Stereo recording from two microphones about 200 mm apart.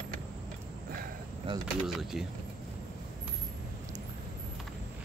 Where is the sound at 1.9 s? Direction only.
Centre (ahead or behind).